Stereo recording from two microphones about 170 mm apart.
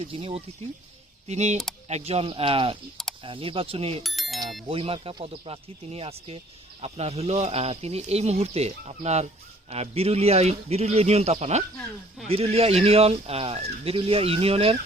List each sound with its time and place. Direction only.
0.0 s speech: 35° right (ahead or behind)
4.0 s bicycle bell: centre (ahead or behind)
4.7 s speech: 35° right (ahead or behind)